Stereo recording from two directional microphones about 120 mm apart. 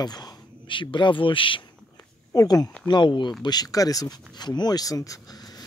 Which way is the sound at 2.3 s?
30° left (ahead or behind).